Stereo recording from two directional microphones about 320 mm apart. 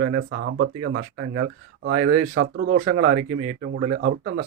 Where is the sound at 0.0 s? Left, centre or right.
Right.